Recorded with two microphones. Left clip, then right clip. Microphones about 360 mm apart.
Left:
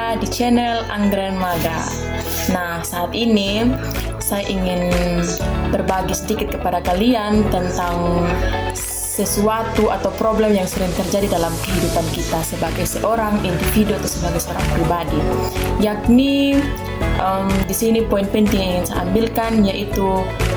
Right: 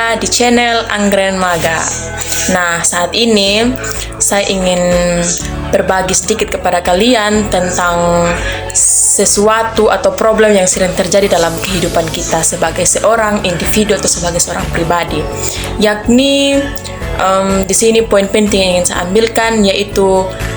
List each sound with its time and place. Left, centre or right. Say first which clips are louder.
0.0 s speech: right 9 dB; left
3.2 s speech: right 8 dB; left
9.1 s speech: right 7 dB; left
13.1 s speech: right 7 dB; left
15.8 s speech: right 7 dB; left